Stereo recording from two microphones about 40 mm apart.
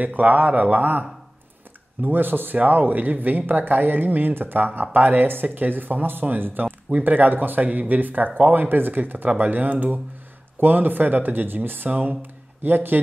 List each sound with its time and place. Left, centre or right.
0.0 s speech: right
11.9 s speech: right